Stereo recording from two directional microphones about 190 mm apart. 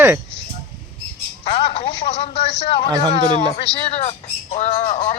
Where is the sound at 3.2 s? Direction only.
30° left (ahead or behind).